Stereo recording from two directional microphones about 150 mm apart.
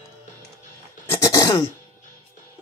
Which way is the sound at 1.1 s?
20° left (ahead or behind).